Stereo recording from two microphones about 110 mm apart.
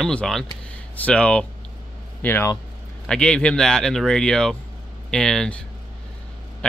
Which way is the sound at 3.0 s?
5° left (ahead or behind).